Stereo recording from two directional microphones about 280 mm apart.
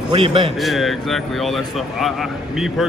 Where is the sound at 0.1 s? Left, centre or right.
Centre.